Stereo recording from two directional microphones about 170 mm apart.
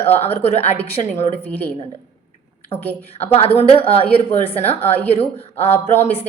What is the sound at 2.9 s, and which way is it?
Speech, 10° left (ahead or behind).